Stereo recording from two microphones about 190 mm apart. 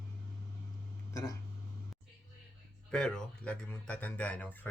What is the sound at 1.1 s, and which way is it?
Speech, 15° left (ahead or behind).